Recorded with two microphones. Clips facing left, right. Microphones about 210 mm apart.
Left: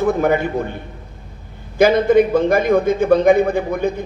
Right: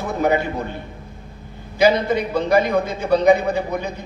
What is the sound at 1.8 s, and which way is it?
A man's voice, 50° left (ahead or behind).